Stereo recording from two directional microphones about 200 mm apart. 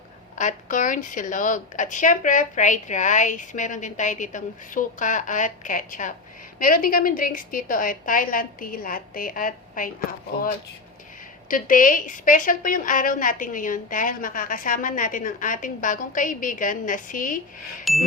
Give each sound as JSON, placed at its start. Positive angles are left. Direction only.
{"t": 0.3, "sound": "a woman's voice", "side_deg": 40}
{"t": 11.4, "sound": "a woman's voice", "side_deg": 45}
{"t": 17.9, "sound": "music", "side_deg": 0}